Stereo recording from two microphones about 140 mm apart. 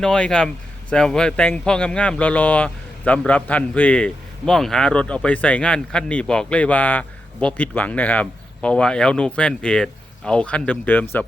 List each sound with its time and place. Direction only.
0.0 s speech: 5° left (ahead or behind)